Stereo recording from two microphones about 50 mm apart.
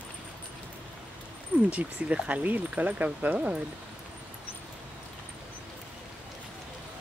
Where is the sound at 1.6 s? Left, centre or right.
Right.